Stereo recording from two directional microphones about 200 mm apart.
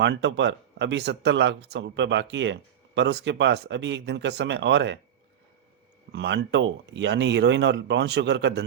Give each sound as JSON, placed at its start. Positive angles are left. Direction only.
{"t": 0.0, "sound": "speech", "side_deg": -60}
{"t": 6.1, "sound": "speech", "side_deg": -60}